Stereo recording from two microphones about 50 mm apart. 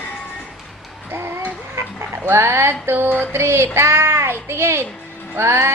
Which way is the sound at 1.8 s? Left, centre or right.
Right.